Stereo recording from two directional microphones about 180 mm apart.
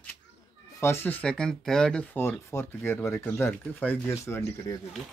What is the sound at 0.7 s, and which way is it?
Speech, 15° left (ahead or behind).